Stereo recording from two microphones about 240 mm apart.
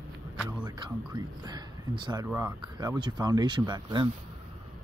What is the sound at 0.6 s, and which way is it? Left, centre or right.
Speech, centre.